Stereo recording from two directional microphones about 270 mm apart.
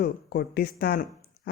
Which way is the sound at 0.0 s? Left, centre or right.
Left.